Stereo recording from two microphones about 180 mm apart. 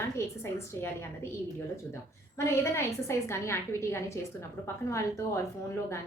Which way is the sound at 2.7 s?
15° left (ahead or behind).